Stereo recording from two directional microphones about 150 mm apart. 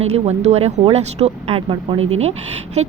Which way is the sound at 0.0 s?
45° right (ahead or behind).